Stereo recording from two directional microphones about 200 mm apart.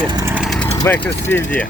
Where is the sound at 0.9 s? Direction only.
10° left (ahead or behind).